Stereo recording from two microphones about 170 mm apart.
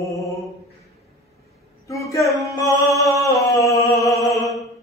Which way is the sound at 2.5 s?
20° left (ahead or behind).